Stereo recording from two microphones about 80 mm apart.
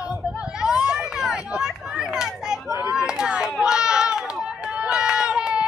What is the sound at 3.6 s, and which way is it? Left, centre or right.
Run, centre.